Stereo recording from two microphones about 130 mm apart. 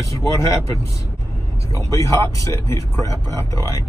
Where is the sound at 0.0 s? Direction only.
25° left (ahead or behind).